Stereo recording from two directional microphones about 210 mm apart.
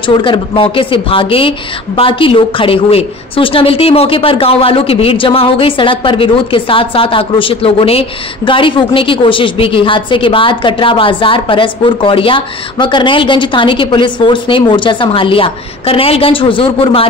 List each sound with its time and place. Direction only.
0.2 s a woman's voice: 25° left (ahead or behind)